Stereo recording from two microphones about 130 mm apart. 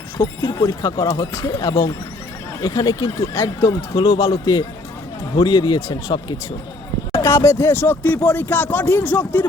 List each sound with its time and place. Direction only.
0.2 s speech: 30° left (ahead or behind)
7.1 s speech: 20° left (ahead or behind)